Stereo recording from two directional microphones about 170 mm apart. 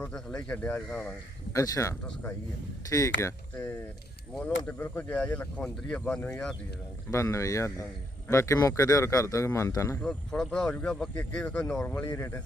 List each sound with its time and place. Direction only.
0.0 s speech: 5° left (ahead or behind)
1.5 s speech: 20° left (ahead or behind)
3.2 s speech: 15° left (ahead or behind)
7.1 s speech: 15° left (ahead or behind)